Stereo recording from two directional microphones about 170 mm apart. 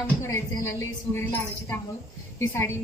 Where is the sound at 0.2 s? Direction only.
20° left (ahead or behind).